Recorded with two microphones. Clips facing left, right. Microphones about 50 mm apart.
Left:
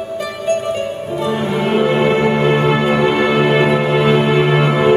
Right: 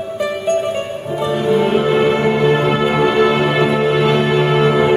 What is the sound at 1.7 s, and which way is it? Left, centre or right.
Music, left.